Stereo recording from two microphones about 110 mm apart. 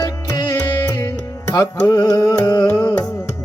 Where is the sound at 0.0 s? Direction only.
35° left (ahead or behind).